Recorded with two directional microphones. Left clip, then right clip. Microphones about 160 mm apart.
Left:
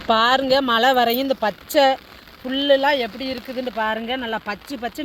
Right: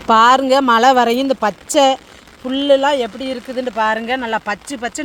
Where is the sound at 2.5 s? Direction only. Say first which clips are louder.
Right 4 dB; 45° right (ahead or behind).